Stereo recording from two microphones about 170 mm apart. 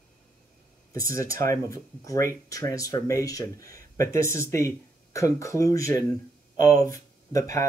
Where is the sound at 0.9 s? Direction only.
20° left (ahead or behind).